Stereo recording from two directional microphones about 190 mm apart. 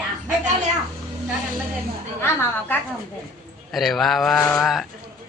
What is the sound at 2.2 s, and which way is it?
Speech, 10° left (ahead or behind).